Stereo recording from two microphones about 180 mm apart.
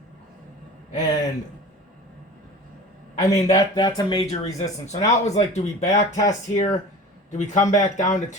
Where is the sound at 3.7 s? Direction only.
20° left (ahead or behind).